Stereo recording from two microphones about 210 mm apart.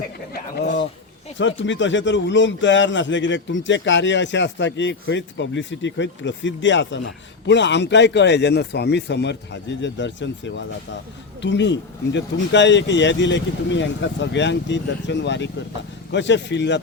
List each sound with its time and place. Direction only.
0.6 s speech: 50° left (ahead or behind)
1.4 s a man's voice: 60° left (ahead or behind)